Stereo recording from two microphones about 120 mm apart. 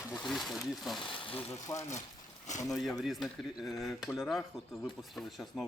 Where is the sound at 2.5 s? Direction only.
80° left.